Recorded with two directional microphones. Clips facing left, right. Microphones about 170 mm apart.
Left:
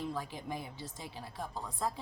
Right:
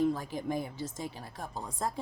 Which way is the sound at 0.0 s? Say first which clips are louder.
Right 9 dB; 45° right (ahead or behind).